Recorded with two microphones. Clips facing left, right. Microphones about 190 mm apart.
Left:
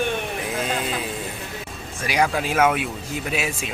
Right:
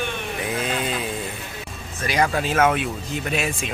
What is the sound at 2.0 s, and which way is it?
Speech, 10° left (ahead or behind).